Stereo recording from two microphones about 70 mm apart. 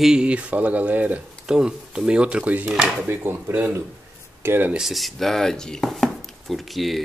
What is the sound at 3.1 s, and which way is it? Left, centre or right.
Speech, right.